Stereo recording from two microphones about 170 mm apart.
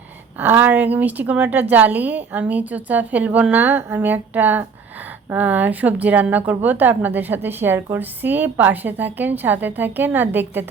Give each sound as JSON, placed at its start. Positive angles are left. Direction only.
{"t": 0.3, "sound": "a woman's voice", "side_deg": -10}